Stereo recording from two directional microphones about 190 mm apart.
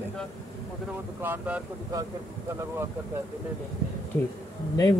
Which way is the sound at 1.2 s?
10° right (ahead or behind).